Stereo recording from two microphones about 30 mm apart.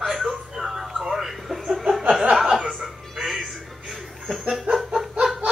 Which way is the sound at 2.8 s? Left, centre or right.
Centre.